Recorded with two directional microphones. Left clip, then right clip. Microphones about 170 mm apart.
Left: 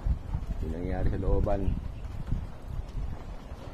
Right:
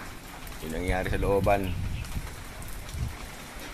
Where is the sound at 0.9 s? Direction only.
20° right (ahead or behind).